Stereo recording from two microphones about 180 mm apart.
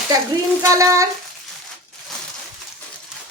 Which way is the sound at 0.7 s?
15° right (ahead or behind).